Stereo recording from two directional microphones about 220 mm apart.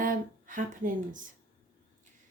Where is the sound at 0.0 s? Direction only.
35° right (ahead or behind).